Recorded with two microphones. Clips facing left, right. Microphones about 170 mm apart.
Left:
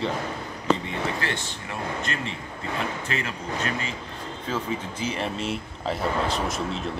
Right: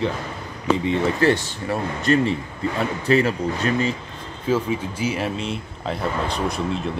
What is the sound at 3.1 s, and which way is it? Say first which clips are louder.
Speech: right 12 dB; 35° right (ahead or behind).